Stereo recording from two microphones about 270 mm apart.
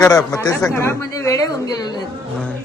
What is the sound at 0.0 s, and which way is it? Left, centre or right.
Speech, centre.